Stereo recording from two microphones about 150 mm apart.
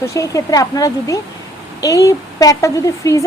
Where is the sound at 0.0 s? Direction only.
20° left (ahead or behind).